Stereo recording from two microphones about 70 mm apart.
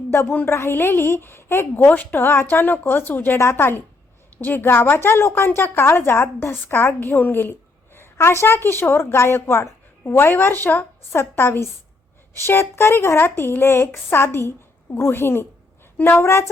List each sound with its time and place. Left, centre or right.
0.3 s a woman's voice: left
1.9 s a woman's voice: left